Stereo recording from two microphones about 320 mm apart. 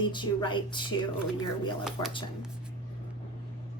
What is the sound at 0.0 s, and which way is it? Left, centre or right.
Speech, centre.